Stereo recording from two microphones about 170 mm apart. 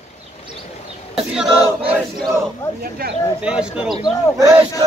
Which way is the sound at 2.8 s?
60° right (ahead or behind).